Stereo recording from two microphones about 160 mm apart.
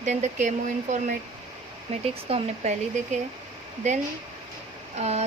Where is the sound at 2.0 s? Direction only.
40° right (ahead or behind).